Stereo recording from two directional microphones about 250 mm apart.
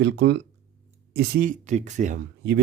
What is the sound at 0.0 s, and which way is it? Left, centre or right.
Speech, right.